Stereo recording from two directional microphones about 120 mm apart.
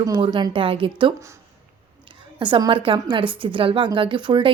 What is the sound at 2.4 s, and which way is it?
A woman's voice, 45° right (ahead or behind).